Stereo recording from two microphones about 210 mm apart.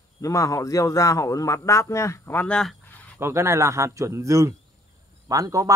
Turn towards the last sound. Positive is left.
turn(degrees=-15)  # may be behind; listen again after turning